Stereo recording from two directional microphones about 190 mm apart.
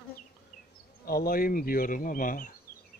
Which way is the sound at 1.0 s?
50° left (ahead or behind).